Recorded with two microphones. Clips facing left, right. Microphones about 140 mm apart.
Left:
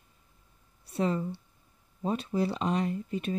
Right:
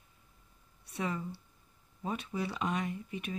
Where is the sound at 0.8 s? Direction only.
30° left (ahead or behind).